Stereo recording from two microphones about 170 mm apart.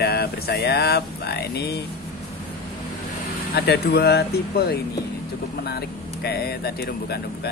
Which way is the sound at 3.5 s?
65° left (ahead or behind).